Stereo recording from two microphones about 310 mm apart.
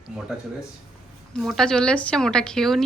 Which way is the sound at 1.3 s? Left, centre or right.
Centre.